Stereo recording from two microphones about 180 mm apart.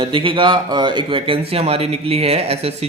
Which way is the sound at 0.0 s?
30° right (ahead or behind).